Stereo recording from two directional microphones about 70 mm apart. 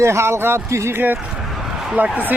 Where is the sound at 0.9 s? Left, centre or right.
Right.